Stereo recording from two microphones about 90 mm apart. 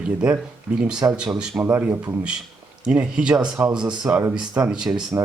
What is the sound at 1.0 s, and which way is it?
Speech, 30° right (ahead or behind).